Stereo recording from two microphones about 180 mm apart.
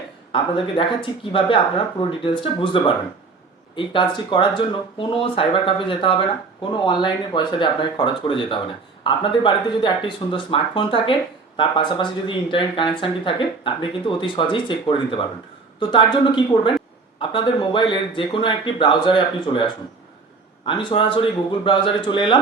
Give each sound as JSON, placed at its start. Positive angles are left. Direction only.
{"t": 0.3, "sound": "speech", "side_deg": 30}